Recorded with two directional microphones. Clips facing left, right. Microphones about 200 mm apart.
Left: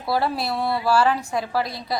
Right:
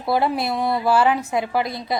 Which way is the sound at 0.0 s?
20° right (ahead or behind).